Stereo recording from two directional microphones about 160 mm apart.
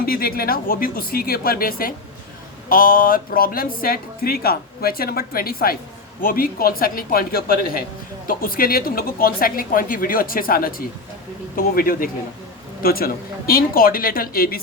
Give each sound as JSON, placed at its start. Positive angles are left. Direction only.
{"t": 0.0, "sound": "speech", "side_deg": 75}